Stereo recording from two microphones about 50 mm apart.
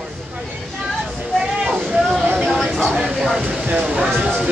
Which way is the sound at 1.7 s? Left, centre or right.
Centre.